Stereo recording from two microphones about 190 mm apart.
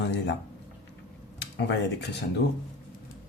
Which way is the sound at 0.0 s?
70° left (ahead or behind).